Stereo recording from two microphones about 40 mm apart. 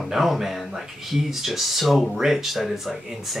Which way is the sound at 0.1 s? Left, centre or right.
Centre.